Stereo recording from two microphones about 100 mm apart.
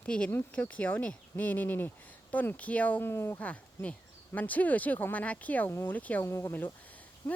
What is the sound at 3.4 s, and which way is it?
Speech, 15° left (ahead or behind).